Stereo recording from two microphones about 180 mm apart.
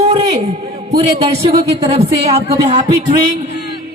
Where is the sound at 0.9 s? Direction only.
35° right (ahead or behind).